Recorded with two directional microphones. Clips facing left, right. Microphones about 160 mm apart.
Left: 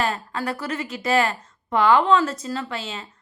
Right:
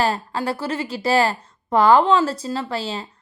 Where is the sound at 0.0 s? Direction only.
30° right (ahead or behind).